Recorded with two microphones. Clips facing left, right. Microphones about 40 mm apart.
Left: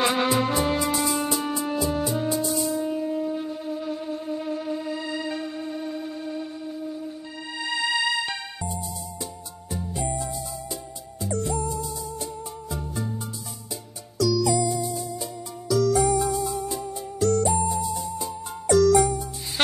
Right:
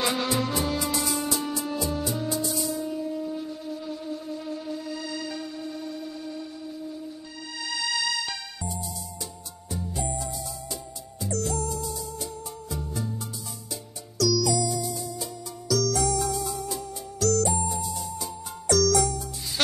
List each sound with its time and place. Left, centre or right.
0.0 s music: left
2.8 s wind instrument: left
7.5 s music: left
10.7 s music: centre
14.1 s music: left
17.8 s music: centre
18.2 s music: left